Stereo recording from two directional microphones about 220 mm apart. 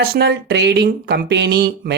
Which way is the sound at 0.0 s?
45° right (ahead or behind).